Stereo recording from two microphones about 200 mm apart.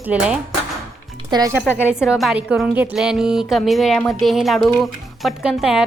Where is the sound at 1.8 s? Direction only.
5° right (ahead or behind).